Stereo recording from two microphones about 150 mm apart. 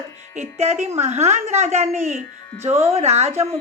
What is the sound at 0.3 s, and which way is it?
A woman's voice, 45° right (ahead or behind).